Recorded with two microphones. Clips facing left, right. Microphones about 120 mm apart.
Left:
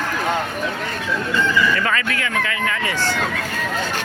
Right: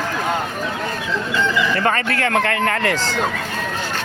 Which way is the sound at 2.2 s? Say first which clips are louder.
Right 5 dB; 60° right (ahead or behind).